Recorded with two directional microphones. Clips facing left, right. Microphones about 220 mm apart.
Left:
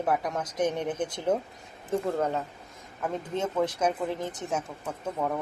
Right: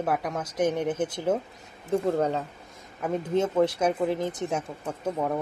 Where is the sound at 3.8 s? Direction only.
10° right (ahead or behind).